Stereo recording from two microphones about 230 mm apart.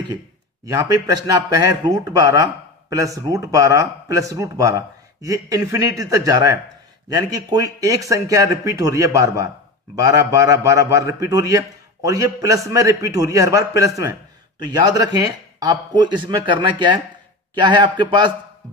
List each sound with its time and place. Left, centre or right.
0.7 s a man's voice: centre